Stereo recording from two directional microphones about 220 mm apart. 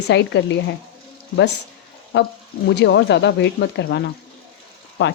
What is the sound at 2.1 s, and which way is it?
Speech, 50° left (ahead or behind).